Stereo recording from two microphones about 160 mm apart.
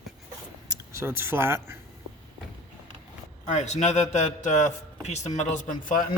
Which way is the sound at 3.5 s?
45° left (ahead or behind).